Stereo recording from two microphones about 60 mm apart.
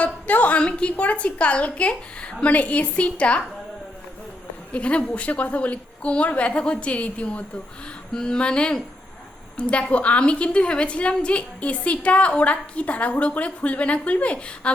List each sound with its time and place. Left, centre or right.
0.0 s a woman's voice: left
4.7 s a woman's voice: left